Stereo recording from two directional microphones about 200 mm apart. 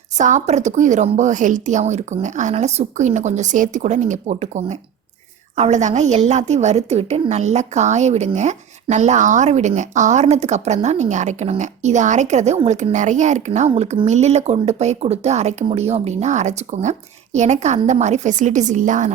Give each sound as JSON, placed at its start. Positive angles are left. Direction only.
{"t": 0.2, "sound": "a woman's voice", "side_deg": -35}